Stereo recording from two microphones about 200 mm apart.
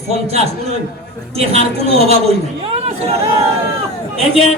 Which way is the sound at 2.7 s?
30° right (ahead or behind).